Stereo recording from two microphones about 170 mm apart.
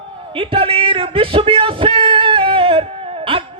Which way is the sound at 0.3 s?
30° right (ahead or behind).